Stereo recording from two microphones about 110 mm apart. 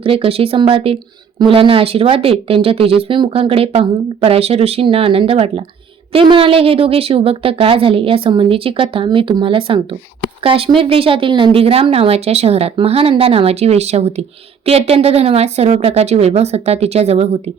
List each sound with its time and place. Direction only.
0.0 s speech: 55° right (ahead or behind)